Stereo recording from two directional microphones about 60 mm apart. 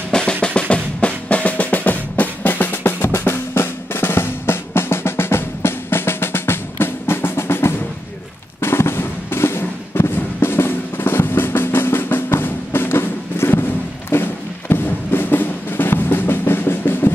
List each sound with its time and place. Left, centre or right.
0.1 s drum: centre; by 7.7 s left
8.5 s music: left